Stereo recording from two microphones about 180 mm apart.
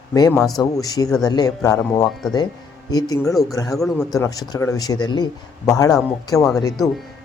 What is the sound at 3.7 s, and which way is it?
Speech, centre (ahead or behind).